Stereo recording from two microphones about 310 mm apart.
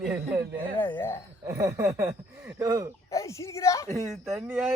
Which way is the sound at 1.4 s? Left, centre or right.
Centre.